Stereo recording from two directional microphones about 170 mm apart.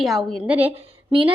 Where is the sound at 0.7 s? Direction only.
30° right (ahead or behind).